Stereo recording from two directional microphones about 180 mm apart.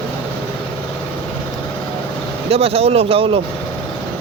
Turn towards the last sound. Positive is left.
turn(degrees=-30)  # may be behind; listen again after turning